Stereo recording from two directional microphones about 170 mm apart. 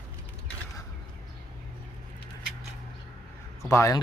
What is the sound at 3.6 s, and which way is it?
Speech, 20° left (ahead or behind).